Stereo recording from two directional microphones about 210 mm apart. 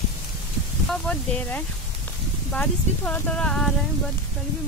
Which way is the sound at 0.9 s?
5° left (ahead or behind).